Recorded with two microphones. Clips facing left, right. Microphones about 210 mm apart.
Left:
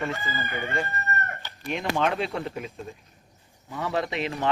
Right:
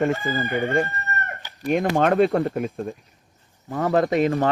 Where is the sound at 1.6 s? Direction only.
50° right (ahead or behind).